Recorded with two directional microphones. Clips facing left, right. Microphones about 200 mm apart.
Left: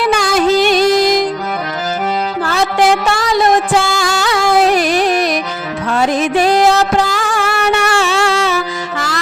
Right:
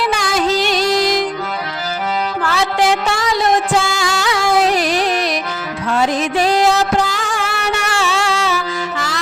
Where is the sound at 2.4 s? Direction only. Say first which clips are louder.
Left 3 dB; 45° left (ahead or behind).